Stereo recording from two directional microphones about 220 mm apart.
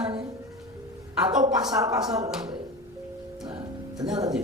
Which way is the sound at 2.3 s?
5° right (ahead or behind).